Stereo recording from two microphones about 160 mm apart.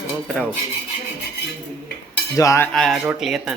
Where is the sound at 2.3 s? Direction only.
20° left (ahead or behind).